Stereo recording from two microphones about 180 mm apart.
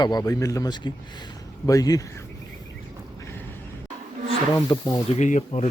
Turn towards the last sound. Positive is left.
turn(degrees=40)  # may be behind; listen again after turning